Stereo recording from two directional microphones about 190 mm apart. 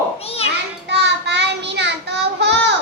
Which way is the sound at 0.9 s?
65° right (ahead or behind).